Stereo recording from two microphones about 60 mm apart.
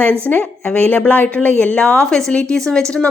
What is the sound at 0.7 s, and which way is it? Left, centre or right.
A woman's voice, left.